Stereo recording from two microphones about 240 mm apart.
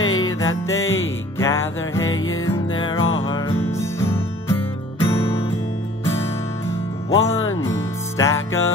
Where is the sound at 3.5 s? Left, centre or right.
Centre.